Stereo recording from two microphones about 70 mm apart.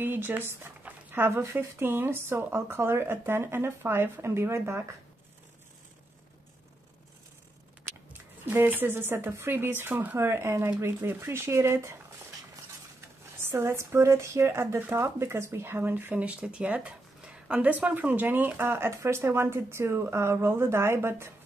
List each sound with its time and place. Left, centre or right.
0.0 s speech: right
0.8 s dog: right
1.4 s speech: right
8.1 s speech: right
13.0 s speech: right